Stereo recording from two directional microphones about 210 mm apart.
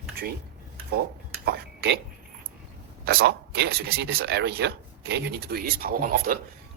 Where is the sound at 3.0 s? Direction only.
45° right (ahead or behind).